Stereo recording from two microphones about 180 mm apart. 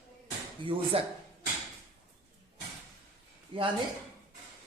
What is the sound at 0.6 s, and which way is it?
Speech, 30° right (ahead or behind).